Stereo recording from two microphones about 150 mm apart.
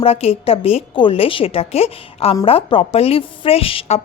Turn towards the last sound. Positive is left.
turn(degrees=40)  # may be behind; listen again after turning